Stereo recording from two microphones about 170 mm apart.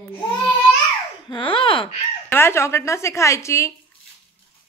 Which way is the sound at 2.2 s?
15° left (ahead or behind).